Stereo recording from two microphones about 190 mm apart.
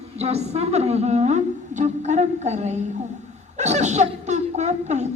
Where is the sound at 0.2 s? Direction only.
35° right (ahead or behind).